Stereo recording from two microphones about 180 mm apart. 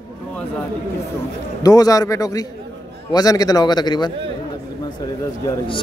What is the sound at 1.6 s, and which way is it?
Speech, 20° left (ahead or behind).